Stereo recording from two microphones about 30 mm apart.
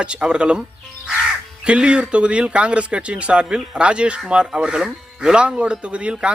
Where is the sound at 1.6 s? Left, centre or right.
Right.